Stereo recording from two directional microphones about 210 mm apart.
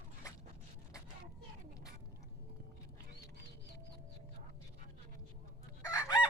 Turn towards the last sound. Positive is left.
turn(degrees=15)  # may be behind; listen again after turning